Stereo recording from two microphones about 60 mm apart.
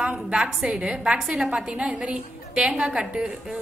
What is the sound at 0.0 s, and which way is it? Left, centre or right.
A woman's voice, centre.